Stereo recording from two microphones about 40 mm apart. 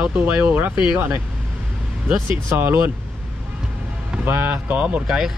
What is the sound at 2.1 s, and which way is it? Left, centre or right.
Speech, right.